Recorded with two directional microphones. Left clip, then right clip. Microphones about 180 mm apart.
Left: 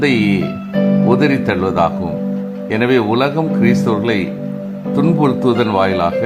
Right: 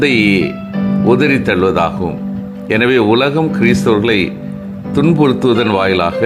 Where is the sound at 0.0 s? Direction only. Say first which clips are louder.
Right 4 dB; 10° right (ahead or behind).